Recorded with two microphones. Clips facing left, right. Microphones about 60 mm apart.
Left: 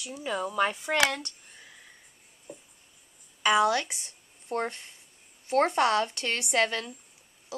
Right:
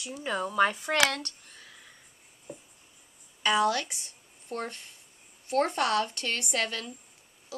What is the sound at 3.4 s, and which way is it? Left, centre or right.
A woman's voice, centre.